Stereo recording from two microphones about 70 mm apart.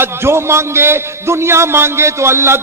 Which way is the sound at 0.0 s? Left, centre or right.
Right.